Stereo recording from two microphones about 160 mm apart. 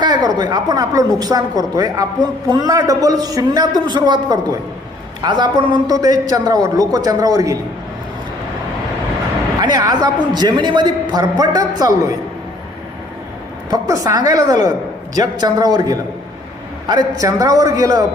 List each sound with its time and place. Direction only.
0.0 s a man's voice: 25° right (ahead or behind)
9.6 s a man's voice: 25° right (ahead or behind)
13.7 s a man's voice: 20° right (ahead or behind)